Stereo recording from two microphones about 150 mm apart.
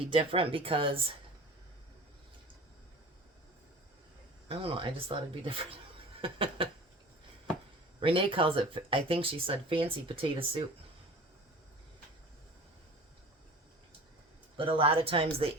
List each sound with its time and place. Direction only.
0.0 s speech: 35° right (ahead or behind)
4.4 s speech: 40° right (ahead or behind)
7.9 s speech: 35° right (ahead or behind)
14.5 s speech: 35° right (ahead or behind)